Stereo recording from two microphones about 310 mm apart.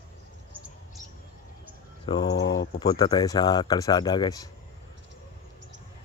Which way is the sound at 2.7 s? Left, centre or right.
Centre.